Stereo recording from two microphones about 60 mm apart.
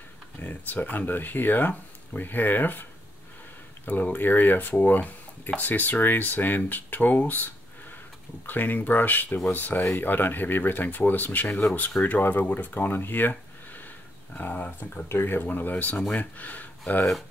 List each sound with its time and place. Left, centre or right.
0.4 s speech: left
15.0 s speech: left